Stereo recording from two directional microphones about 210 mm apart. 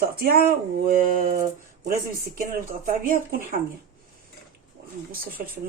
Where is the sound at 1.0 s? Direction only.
40° right (ahead or behind).